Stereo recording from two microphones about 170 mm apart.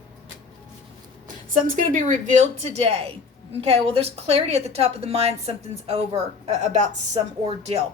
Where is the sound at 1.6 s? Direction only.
50° right (ahead or behind).